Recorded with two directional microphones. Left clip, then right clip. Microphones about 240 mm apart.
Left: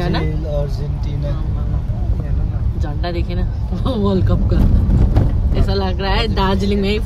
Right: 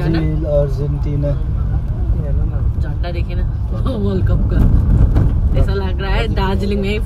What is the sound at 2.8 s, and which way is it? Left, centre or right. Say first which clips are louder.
A woman's voice: left 5 dB; centre.